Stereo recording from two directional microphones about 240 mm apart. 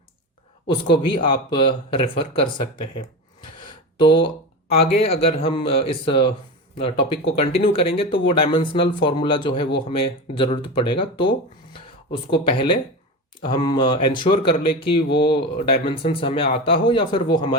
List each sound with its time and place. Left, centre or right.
1.0 s speech: left
3.7 s a sound: left
4.8 s speech: left